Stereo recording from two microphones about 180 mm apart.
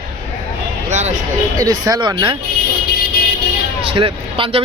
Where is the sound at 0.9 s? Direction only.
40° right (ahead or behind).